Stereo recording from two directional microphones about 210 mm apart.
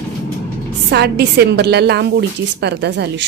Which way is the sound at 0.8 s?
55° right (ahead or behind).